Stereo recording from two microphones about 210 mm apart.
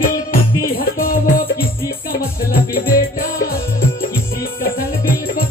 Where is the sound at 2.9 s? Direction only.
45° left (ahead or behind).